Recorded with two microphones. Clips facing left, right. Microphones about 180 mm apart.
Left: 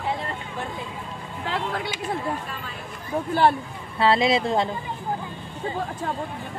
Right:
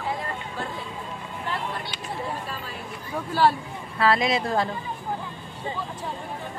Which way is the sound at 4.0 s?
25° left (ahead or behind).